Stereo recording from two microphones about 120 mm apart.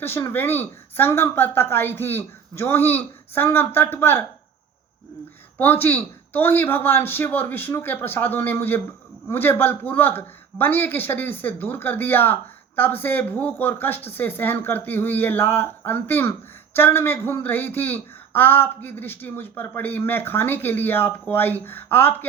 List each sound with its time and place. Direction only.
0.0 s speech: 20° left (ahead or behind)
5.5 s speech: 15° left (ahead or behind)